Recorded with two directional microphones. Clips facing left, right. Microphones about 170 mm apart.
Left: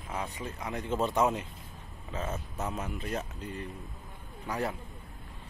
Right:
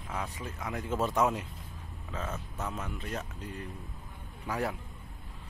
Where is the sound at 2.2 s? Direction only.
25° left (ahead or behind).